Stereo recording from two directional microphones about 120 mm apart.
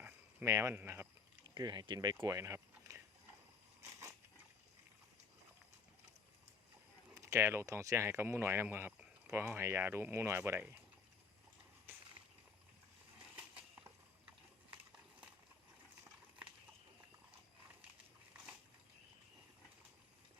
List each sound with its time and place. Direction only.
0.4 s speech: 25° right (ahead or behind)
1.5 s speech: 35° right (ahead or behind)
2.2 s a sound: 25° right (ahead or behind)
7.1 s speech: 25° right (ahead or behind)